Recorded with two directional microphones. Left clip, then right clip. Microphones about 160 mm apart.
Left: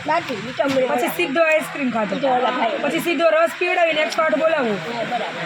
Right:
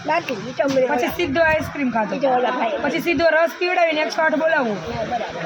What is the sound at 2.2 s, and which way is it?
Speech, centre (ahead or behind).